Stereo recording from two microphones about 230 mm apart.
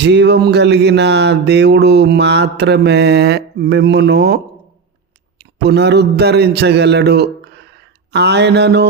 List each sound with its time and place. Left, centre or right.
0.0 s speech: right
5.4 s a man's voice: right